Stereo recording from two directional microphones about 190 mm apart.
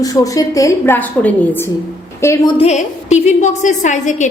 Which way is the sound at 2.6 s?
35° left (ahead or behind).